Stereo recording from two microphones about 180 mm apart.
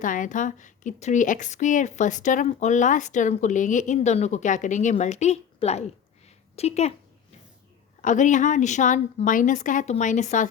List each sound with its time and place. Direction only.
0.0 s a woman's voice: 45° left (ahead or behind)
8.0 s a woman's voice: 45° left (ahead or behind)